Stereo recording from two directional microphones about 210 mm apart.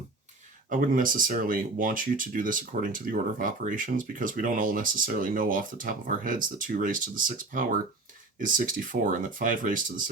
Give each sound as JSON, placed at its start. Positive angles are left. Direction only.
{"t": 0.7, "sound": "speech", "side_deg": -40}